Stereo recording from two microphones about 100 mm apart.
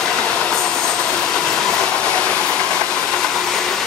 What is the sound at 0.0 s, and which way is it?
Train, 10° left (ahead or behind).